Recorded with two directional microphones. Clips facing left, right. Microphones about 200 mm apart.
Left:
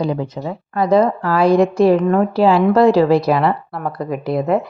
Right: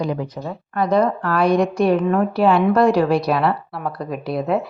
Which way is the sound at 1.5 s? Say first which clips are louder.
Left 5 dB; 25° left (ahead or behind).